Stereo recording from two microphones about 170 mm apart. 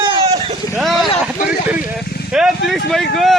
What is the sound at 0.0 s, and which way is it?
Vehicle, 35° right (ahead or behind).